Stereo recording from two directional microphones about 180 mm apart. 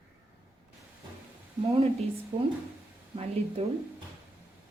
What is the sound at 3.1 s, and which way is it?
Speech, 35° right (ahead or behind).